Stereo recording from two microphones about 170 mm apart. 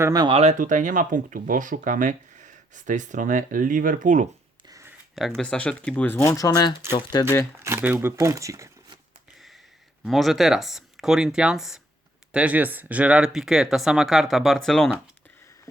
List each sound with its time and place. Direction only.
0.0 s speech: 25° right (ahead or behind); by 4.3 s 50° right (ahead or behind)
4.7 s a sound: 15° right (ahead or behind)
5.4 s speech: 5° left (ahead or behind)
7.6 s speech: 15° right (ahead or behind)
10.0 s speech: centre (ahead or behind)